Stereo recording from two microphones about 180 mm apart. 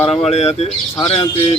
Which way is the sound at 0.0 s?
35° left (ahead or behind).